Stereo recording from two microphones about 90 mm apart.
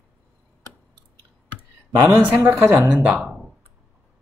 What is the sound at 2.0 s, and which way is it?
A man's voice, 25° right (ahead or behind).